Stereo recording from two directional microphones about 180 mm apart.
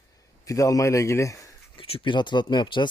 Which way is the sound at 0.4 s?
20° left (ahead or behind).